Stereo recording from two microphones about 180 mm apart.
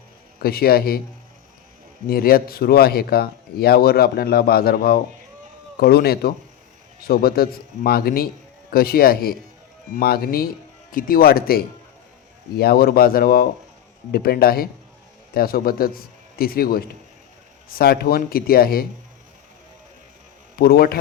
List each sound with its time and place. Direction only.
0.3 s speech: 60° left (ahead or behind)
2.0 s a man's voice: 55° left (ahead or behind)
20.6 s speech: 55° left (ahead or behind)